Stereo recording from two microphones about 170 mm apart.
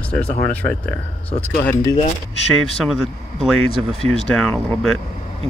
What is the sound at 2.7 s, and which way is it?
Speech, centre (ahead or behind).